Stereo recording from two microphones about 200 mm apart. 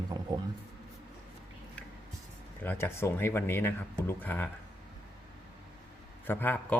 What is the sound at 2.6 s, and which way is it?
Speech, 10° left (ahead or behind).